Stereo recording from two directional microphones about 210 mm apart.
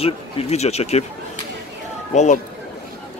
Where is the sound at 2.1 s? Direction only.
35° left (ahead or behind).